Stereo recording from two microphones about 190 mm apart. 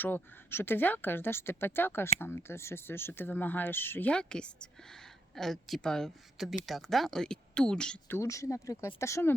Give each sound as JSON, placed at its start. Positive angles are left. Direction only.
{"t": 0.0, "sound": "speech", "side_deg": 10}
{"t": 8.2, "sound": "speech", "side_deg": 15}